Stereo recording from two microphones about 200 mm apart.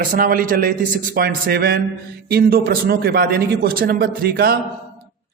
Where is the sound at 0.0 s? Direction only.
45° right (ahead or behind).